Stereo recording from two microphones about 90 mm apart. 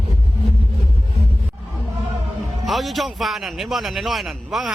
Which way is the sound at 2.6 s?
Centre (ahead or behind).